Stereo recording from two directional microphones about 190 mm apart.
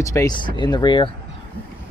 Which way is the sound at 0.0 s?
15° left (ahead or behind).